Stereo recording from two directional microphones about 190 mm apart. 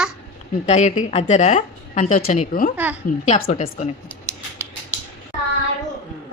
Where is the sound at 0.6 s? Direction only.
40° left (ahead or behind).